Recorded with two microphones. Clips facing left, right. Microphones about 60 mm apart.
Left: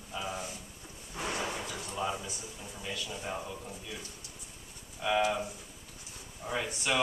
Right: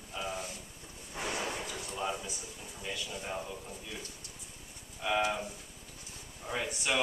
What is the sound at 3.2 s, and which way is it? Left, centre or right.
Speech, centre.